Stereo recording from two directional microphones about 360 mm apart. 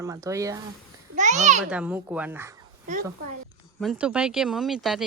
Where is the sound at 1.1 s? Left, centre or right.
Centre.